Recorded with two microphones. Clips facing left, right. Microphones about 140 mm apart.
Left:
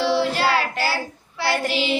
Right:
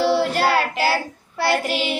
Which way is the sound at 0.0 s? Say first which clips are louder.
Right 2 dB; 50° right (ahead or behind).